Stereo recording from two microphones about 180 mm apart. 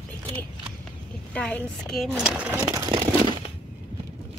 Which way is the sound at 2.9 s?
25° right (ahead or behind).